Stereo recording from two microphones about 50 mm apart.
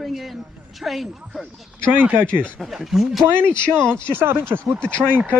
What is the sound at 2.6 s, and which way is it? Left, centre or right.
Speech, centre.